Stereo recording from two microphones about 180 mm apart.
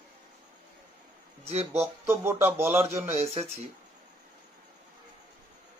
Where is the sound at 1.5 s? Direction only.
35° right (ahead or behind).